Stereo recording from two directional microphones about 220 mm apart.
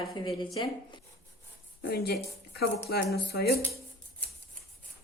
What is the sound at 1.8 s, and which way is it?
Speech, 45° left (ahead or behind).